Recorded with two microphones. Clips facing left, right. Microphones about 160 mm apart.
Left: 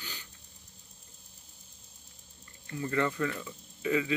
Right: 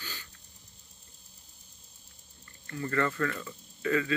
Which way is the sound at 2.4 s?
15° left (ahead or behind).